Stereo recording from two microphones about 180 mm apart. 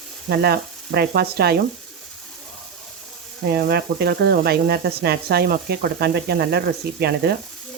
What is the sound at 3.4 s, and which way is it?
Sizzle, 60° right (ahead or behind).